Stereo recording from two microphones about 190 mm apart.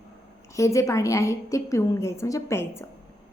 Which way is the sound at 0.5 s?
15° left (ahead or behind).